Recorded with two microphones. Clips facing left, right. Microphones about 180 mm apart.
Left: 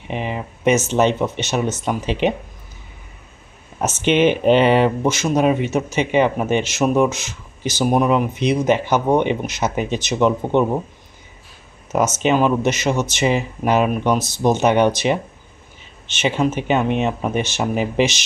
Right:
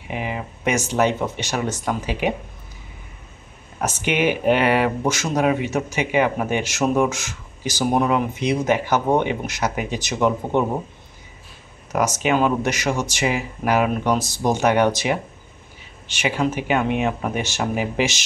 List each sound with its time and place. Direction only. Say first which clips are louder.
0.1 s speech: left 2 dB; 20° left (ahead or behind)
3.8 s speech: left 5 dB; 25° left (ahead or behind)
11.9 s speech: left 3 dB; 25° left (ahead or behind)